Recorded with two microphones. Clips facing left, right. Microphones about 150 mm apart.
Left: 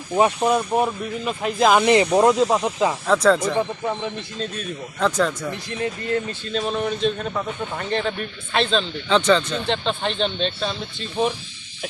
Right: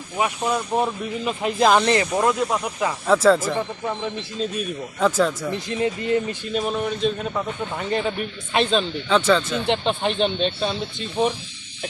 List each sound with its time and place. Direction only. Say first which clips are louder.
0.4 s speech: left 3 dB; 15° left (ahead or behind)
1.2 s speech: even; centre (ahead or behind)
1.9 s speech: left 4 dB; 20° left (ahead or behind)
3.1 s speech: right 2 dB; centre (ahead or behind)
5.8 s speech: right 2 dB; 15° right (ahead or behind)
11.2 s speech: right 1 dB; centre (ahead or behind)